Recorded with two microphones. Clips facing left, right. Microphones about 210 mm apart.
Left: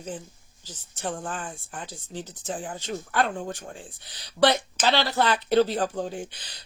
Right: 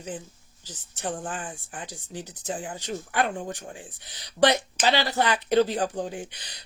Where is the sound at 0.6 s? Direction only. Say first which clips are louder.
Even; 15° right (ahead or behind).